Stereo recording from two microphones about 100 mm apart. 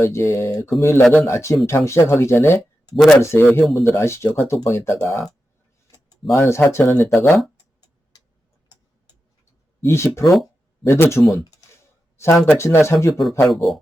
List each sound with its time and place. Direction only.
0.0 s speech: 30° left (ahead or behind)
2.9 s speech: 5° left (ahead or behind)
3.2 s speech: 25° left (ahead or behind)
6.3 s speech: 30° left (ahead or behind)
9.8 s speech: 25° left (ahead or behind)
12.1 s a sound: 30° left (ahead or behind)
12.5 s speech: 25° left (ahead or behind)
13.5 s speech: centre (ahead or behind)